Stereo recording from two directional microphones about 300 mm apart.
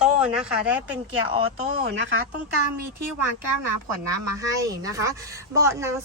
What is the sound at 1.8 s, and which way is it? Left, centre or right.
Speech, right.